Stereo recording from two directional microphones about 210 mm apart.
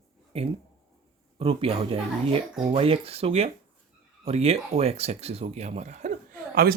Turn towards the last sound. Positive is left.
turn(degrees=-45)  # may be behind; listen again after turning